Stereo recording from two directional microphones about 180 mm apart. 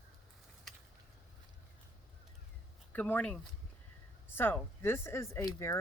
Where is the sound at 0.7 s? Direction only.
Centre (ahead or behind).